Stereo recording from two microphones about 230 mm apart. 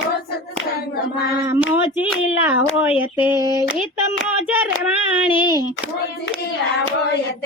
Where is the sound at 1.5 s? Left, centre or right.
Centre.